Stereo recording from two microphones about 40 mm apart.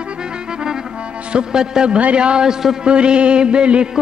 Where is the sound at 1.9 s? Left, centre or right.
Right; by 2.9 s centre.